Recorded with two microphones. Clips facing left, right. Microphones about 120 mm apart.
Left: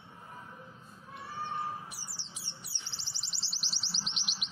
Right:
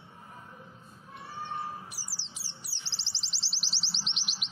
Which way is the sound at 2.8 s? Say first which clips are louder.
Right 1 dB; 90° right.